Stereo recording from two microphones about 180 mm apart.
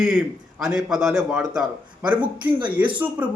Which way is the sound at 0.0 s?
5° right (ahead or behind).